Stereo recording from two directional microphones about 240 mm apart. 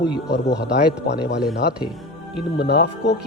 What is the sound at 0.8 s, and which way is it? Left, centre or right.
Speech, left.